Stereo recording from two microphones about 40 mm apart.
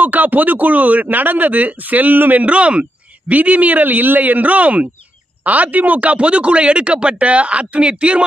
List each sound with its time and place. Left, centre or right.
0.0 s speech: right
2.4 s a man's voice: right